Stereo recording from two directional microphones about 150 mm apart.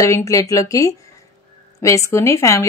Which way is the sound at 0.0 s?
20° left (ahead or behind).